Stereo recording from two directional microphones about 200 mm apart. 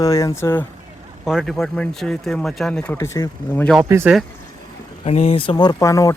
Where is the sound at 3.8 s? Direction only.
10° right (ahead or behind).